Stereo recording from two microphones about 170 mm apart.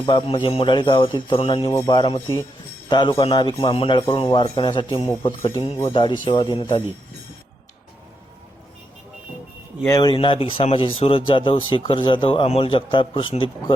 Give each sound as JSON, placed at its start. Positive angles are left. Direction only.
{"t": 0.0, "sound": "speech", "side_deg": 30}
{"t": 1.7, "sound": "speech", "side_deg": 20}
{"t": 9.8, "sound": "speech", "side_deg": 25}